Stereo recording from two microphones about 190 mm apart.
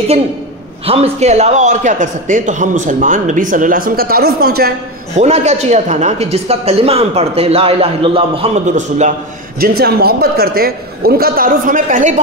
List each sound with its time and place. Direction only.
0.8 s a man's voice: 30° right (ahead or behind); by 4.7 s 55° right (ahead or behind)
5.1 s speech: 35° right (ahead or behind)
9.6 s a man's voice: 55° right (ahead or behind)